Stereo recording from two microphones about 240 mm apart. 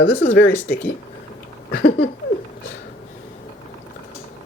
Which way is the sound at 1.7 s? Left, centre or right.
Left.